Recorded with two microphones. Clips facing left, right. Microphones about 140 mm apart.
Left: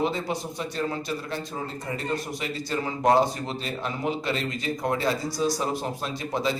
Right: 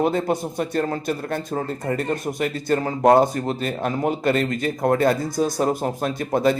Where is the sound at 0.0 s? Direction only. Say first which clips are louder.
Right 6 dB; 50° right (ahead or behind).